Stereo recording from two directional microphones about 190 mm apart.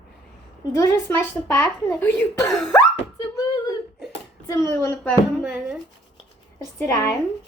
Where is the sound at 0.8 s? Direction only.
15° left (ahead or behind).